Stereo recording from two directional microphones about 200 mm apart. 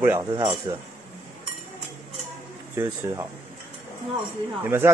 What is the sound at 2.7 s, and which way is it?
Speech, 15° right (ahead or behind).